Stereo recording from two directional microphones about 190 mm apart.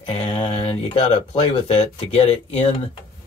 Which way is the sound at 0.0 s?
30° left (ahead or behind).